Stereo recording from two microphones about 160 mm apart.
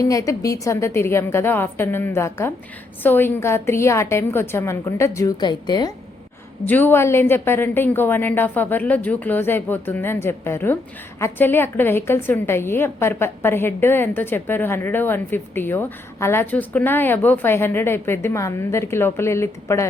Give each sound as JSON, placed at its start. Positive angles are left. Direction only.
{"t": 0.0, "sound": "a woman's voice", "side_deg": 20}
{"t": 6.7, "sound": "a woman's voice", "side_deg": 10}